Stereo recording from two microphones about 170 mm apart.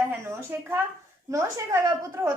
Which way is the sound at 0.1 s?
15° right (ahead or behind).